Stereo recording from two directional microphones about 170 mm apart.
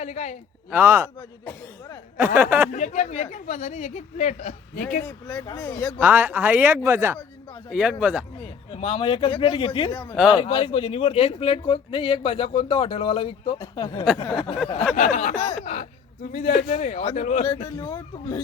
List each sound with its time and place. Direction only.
0.0 s speech: 40° left (ahead or behind)
0.7 s speech: 15° right (ahead or behind)
2.1 s speech: 10° right (ahead or behind)
2.7 s speech: 45° left (ahead or behind)
5.0 s speech: 20° left (ahead or behind)
6.0 s speech: 10° right (ahead or behind)
8.7 s speech: 35° left (ahead or behind)
10.2 s speech: 5° right (ahead or behind)
10.4 s speech: 30° left (ahead or behind)
14.9 s speech: 45° left (ahead or behind)
17.6 s speech: 25° left (ahead or behind)